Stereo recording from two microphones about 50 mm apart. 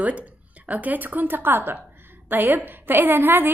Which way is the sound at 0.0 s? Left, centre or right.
Right.